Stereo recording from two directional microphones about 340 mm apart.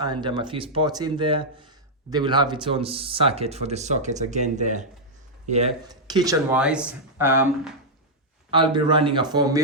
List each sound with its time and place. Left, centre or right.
0.0 s speech: centre